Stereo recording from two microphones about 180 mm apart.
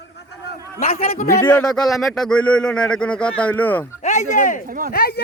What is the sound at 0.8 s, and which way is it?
Speech, 55° left (ahead or behind).